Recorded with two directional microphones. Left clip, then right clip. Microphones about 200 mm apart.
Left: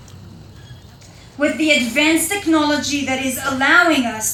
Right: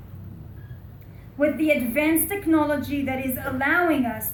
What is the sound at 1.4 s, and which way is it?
A woman's voice, 45° right (ahead or behind).